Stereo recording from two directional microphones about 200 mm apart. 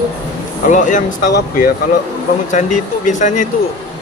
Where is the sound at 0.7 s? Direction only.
40° left (ahead or behind).